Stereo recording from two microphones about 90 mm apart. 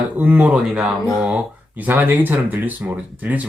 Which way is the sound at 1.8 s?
20° right (ahead or behind).